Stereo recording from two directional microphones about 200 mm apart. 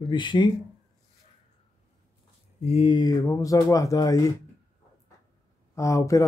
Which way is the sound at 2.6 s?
30° left (ahead or behind).